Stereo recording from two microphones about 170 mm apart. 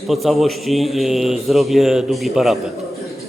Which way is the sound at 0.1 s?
Centre (ahead or behind).